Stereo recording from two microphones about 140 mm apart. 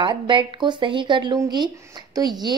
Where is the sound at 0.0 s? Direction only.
35° right (ahead or behind).